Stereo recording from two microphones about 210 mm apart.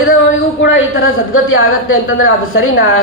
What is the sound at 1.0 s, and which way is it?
Speech, 75° left (ahead or behind).